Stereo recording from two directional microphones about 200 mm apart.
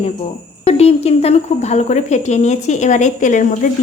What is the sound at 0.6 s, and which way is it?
A woman's voice, 30° left (ahead or behind).